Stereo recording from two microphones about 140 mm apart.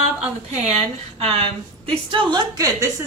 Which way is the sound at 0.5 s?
45° right (ahead or behind).